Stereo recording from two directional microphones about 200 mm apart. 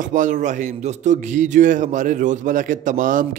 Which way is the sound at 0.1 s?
40° right (ahead or behind).